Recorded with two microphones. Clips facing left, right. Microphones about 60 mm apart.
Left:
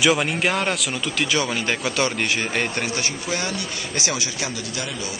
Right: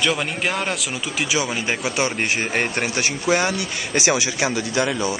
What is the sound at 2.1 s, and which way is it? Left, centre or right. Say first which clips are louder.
Speech: right 1 dB; right.